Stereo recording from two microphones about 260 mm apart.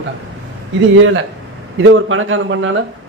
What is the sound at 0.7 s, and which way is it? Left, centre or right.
A man's voice, right.